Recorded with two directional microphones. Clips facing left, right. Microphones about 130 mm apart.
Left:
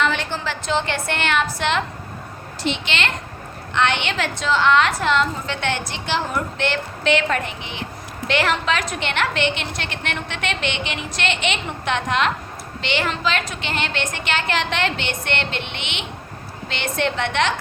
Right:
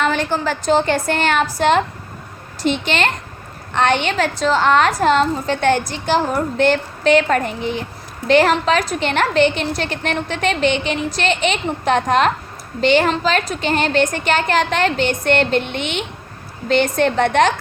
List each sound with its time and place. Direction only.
0.0 s a woman's voice: 45° right (ahead or behind)